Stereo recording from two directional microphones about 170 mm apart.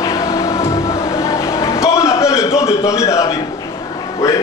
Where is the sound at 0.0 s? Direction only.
20° left (ahead or behind).